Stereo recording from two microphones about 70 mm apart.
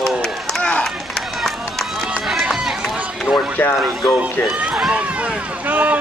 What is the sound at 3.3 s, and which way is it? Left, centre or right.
Speech, centre.